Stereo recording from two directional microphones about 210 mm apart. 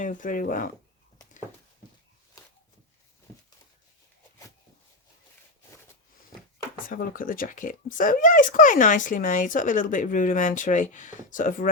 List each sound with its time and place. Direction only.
0.0 s speech: 40° left (ahead or behind)
6.8 s speech: 40° left (ahead or behind)